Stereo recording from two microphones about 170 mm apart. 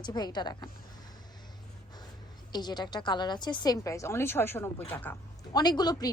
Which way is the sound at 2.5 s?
25° left (ahead or behind).